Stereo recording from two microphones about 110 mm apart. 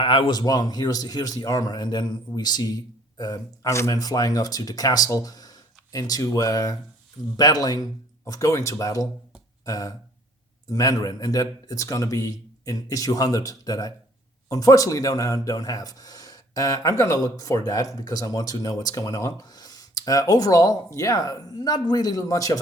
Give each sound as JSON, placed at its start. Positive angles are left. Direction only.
{"t": 0.0, "sound": "speech", "side_deg": 55}
{"t": 0.3, "sound": "speech", "side_deg": 35}